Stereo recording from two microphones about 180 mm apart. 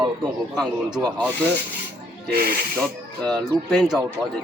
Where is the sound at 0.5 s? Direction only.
5° left (ahead or behind).